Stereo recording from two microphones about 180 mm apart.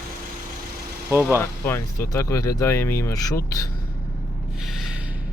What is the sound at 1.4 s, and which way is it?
Speech, 10° left (ahead or behind).